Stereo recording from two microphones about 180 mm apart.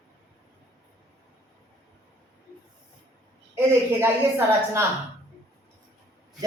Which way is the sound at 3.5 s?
15° right (ahead or behind).